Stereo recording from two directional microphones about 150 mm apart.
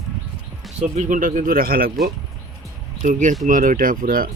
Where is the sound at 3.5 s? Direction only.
65° right (ahead or behind).